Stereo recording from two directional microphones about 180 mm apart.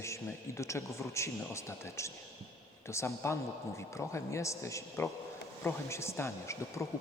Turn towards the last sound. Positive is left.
turn(degrees=15)  # may be behind; listen again after turning